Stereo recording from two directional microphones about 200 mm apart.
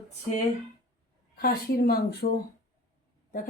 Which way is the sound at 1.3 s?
50° left (ahead or behind).